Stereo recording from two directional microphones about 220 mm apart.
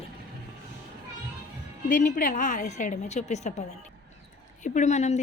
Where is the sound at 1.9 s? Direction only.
40° left (ahead or behind).